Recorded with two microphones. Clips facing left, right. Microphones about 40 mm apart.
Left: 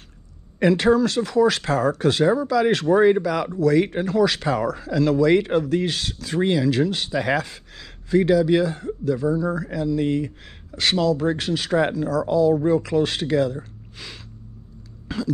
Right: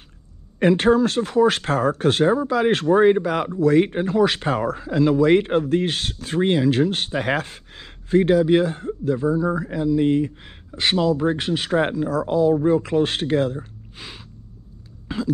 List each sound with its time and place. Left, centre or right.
0.7 s speech: right
2.3 s speech: right
4.7 s speech: right
5.2 s speech: right
6.9 s speech: right
13.9 s a sound: right
15.1 s music: right